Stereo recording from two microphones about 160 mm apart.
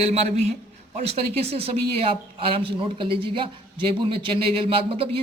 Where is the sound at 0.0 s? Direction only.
40° right (ahead or behind).